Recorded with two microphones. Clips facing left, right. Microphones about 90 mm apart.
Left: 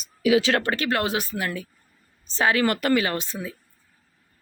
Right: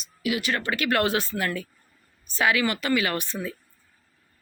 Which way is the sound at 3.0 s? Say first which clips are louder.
Even; 25° left (ahead or behind).